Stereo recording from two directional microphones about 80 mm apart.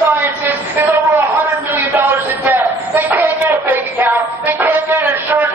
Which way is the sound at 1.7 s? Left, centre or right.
Right.